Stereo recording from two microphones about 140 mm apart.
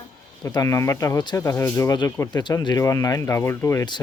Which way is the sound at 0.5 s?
25° left (ahead or behind).